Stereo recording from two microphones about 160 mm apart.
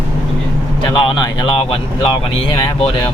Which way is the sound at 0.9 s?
30° left (ahead or behind).